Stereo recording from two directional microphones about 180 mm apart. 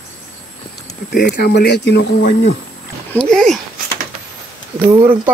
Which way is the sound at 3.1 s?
5° left (ahead or behind).